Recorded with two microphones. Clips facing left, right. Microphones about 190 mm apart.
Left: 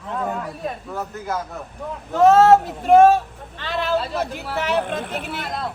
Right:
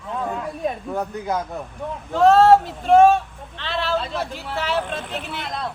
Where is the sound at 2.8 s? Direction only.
5° left (ahead or behind).